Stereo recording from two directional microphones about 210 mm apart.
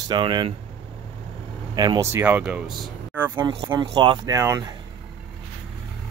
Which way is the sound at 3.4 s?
25° right (ahead or behind).